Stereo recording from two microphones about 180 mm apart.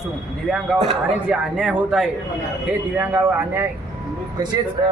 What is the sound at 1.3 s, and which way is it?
Speech, 5° right (ahead or behind).